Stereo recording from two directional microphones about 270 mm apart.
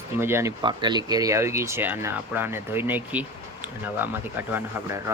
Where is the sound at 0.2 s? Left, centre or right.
Centre.